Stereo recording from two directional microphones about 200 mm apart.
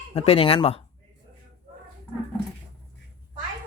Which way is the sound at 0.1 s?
30° left (ahead or behind).